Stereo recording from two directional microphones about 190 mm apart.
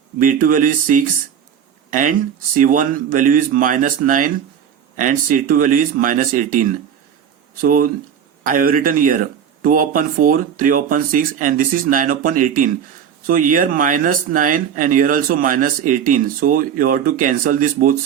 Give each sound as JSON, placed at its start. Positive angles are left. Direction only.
{"t": 0.2, "sound": "speech", "side_deg": -45}